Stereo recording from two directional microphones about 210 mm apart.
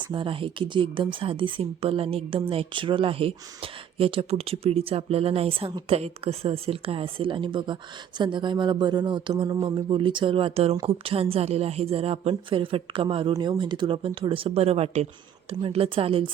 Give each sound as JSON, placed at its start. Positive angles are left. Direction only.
{"t": 0.1, "sound": "a woman's voice", "side_deg": -25}